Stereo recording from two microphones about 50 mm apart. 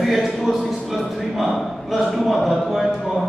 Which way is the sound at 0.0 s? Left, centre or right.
Centre.